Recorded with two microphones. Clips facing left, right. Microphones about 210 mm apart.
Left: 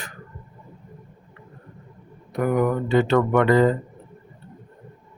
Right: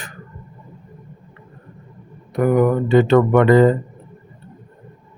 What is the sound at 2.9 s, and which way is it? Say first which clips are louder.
Speech: right 5 dB; 20° right (ahead or behind).